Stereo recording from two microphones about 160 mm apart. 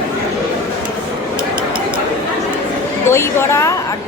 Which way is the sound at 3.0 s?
15° left (ahead or behind).